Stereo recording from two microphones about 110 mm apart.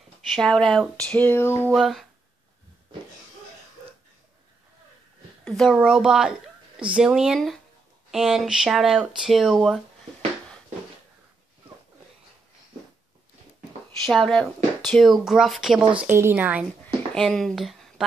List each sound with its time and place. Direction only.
0.4 s speech: 5° left (ahead or behind); by 1.7 s 20° left (ahead or behind)
1.7 s speech: centre (ahead or behind)
5.5 s speech: centre (ahead or behind)
14.0 s speech: centre (ahead or behind)
16.0 s speech: 20° right (ahead or behind)
16.8 s a sound: 5° left (ahead or behind)